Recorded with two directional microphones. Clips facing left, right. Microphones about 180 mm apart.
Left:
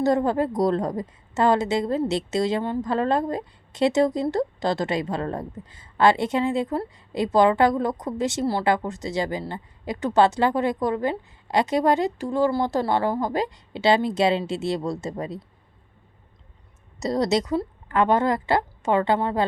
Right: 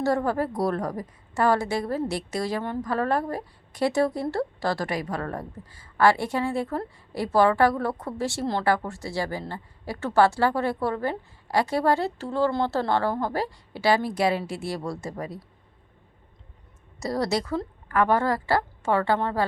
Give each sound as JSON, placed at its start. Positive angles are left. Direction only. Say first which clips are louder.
{"t": 0.0, "sound": "a woman's voice", "louder": "left 3 dB", "side_deg": 20}
{"t": 17.0, "sound": "a woman's voice", "louder": "left 4 dB", "side_deg": 20}